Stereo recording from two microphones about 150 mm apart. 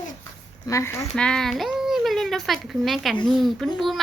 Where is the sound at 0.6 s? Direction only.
20° left (ahead or behind).